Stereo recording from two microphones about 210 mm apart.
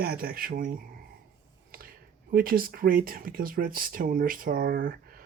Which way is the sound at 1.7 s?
45° right (ahead or behind).